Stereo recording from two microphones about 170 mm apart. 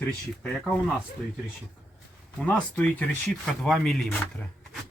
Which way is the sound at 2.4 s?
10° left (ahead or behind).